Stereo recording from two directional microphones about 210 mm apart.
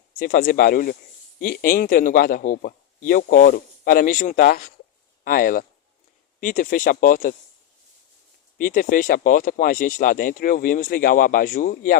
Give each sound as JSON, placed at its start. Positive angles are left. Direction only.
{"t": 0.2, "sound": "speech", "side_deg": 45}
{"t": 8.5, "sound": "speech", "side_deg": 40}